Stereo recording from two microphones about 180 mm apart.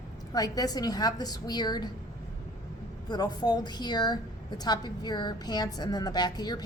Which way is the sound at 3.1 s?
20° left (ahead or behind).